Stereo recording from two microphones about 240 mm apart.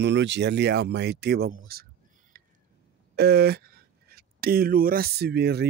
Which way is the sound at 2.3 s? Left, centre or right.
Right.